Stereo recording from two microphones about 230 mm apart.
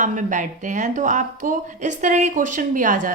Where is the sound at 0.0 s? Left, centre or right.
Right.